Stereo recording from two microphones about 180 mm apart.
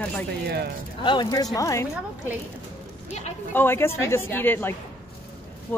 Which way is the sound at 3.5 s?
10° left (ahead or behind).